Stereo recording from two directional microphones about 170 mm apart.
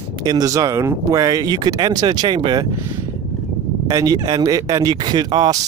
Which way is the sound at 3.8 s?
20° right (ahead or behind).